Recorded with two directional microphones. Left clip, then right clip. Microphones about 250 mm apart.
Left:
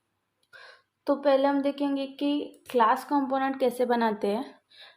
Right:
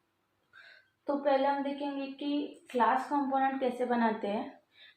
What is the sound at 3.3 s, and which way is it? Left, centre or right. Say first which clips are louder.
A woman's voice: left 3 dB; left.